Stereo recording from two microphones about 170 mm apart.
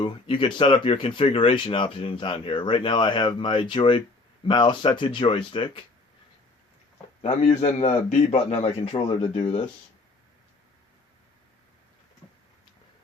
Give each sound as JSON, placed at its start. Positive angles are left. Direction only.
{"t": 0.0, "sound": "speech", "side_deg": 30}
{"t": 7.2, "sound": "a man's voice", "side_deg": 40}